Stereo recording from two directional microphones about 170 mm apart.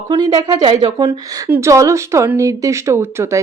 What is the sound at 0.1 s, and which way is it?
A woman's voice, 25° right (ahead or behind).